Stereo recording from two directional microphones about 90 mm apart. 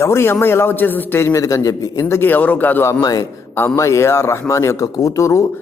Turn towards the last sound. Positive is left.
turn(degrees=35)  # may be behind; listen again after turning